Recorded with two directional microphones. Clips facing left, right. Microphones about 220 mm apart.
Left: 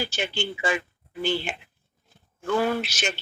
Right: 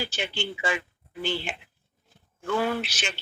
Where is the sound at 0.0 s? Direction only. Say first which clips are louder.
Left 2 dB; 45° left (ahead or behind).